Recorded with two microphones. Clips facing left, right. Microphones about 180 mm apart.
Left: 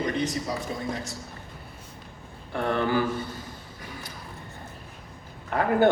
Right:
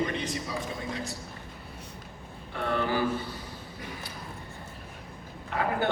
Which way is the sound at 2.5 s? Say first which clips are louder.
Left 4 dB; 50° left (ahead or behind).